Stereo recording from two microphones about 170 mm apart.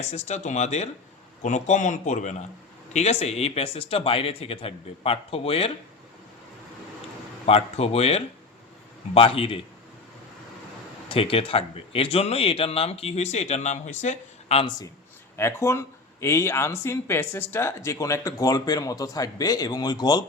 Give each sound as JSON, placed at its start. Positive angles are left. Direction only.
{"t": 0.0, "sound": "speech", "side_deg": 40}
{"t": 7.4, "sound": "speech", "side_deg": 35}
{"t": 11.1, "sound": "speech", "side_deg": 35}
{"t": 15.4, "sound": "speech", "side_deg": 15}